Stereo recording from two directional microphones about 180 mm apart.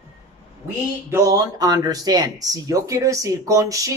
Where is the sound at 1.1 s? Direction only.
20° right (ahead or behind).